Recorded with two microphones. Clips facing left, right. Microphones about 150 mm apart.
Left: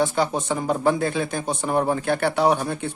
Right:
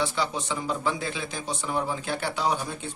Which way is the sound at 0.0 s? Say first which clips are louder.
Left 6 dB; 50° left (ahead or behind).